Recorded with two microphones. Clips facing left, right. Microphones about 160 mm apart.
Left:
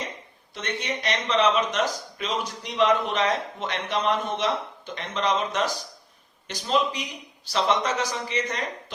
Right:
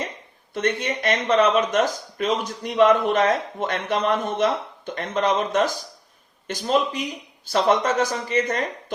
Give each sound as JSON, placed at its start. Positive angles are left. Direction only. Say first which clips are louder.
{"t": 0.5, "sound": "speech", "louder": "right 7 dB", "side_deg": -50}